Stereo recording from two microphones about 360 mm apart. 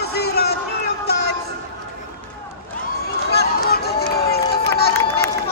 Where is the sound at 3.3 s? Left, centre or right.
Left.